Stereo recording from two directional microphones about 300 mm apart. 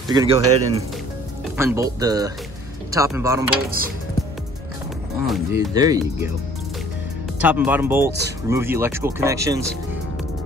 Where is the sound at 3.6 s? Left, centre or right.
Right.